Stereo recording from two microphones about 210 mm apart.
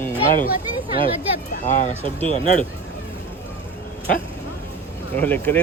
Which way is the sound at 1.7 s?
35° left (ahead or behind).